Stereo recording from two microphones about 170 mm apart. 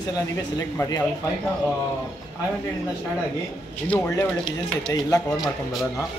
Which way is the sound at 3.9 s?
15° left (ahead or behind).